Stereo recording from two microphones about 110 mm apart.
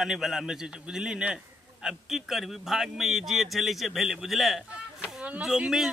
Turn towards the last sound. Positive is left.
turn(degrees=-5)  # may be behind; listen again after turning